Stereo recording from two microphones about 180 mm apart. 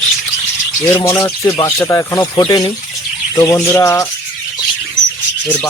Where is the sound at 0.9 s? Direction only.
20° left (ahead or behind).